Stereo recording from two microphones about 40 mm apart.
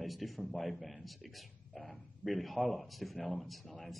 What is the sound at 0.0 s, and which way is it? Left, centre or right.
A man's voice, centre.